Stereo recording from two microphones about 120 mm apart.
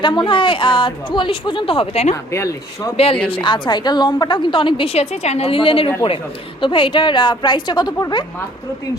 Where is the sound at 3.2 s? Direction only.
45° left (ahead or behind).